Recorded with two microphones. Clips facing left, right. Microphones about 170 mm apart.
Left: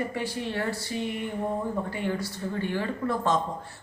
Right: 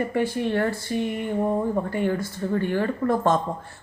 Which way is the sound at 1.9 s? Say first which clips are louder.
Right 5 dB; 50° right (ahead or behind).